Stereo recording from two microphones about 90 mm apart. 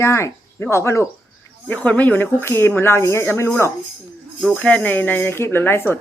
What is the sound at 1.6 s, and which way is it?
Speech, 15° left (ahead or behind).